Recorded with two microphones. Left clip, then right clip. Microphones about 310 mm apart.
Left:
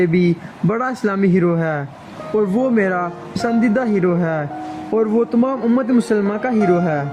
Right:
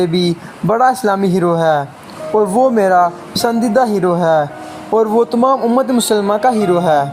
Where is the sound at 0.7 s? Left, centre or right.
Right.